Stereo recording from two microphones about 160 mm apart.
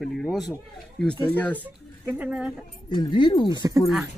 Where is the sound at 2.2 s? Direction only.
5° right (ahead or behind).